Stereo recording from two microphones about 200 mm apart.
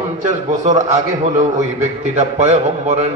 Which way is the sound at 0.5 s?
40° right (ahead or behind).